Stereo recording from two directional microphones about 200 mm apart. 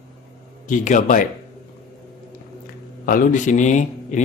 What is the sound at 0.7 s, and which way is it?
Speech, 40° left (ahead or behind).